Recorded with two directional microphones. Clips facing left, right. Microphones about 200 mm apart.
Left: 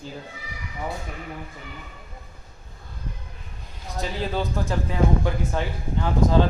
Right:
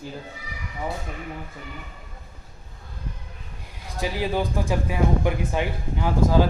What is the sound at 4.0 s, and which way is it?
Speech, 15° right (ahead or behind).